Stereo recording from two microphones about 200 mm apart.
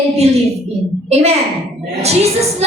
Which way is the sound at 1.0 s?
30° right (ahead or behind).